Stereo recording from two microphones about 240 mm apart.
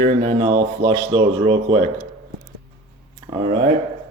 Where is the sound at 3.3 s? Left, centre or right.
Right.